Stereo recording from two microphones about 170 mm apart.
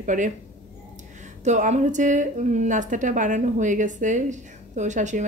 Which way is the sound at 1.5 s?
45° right (ahead or behind).